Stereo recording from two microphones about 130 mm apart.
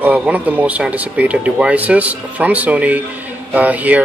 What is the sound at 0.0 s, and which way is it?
Speech, 10° right (ahead or behind).